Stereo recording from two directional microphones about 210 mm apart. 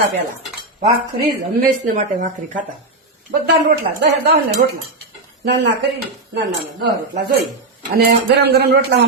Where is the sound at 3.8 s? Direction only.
50° right (ahead or behind).